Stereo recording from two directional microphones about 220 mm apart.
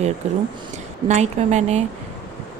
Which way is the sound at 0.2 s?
30° right (ahead or behind).